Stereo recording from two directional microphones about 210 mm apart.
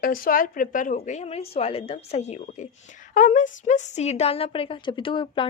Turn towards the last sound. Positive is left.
turn(degrees=25)  # may be behind; listen again after turning